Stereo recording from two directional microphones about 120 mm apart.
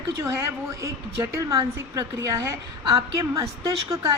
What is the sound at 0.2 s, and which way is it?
A woman's voice, 20° right (ahead or behind).